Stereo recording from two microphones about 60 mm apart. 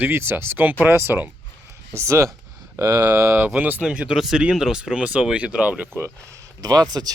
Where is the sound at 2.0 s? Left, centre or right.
Right.